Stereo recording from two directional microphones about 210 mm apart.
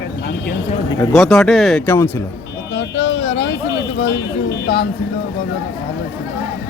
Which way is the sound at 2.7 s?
55° left (ahead or behind).